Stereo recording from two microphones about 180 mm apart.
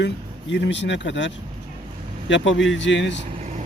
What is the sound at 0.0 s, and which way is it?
Speech, 80° left.